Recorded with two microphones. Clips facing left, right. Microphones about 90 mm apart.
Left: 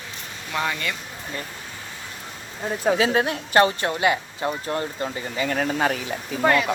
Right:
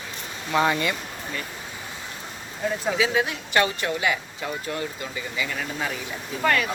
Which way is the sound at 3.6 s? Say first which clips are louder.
Left 4 dB; 35° left (ahead or behind).